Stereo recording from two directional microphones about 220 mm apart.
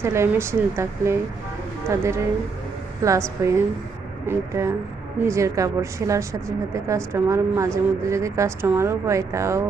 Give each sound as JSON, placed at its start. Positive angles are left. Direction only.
{"t": 0.0, "sound": "speech", "side_deg": -10}